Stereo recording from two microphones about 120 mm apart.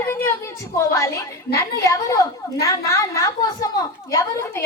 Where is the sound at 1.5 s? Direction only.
25° left (ahead or behind).